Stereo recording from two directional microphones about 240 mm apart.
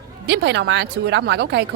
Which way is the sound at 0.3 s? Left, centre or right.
Right.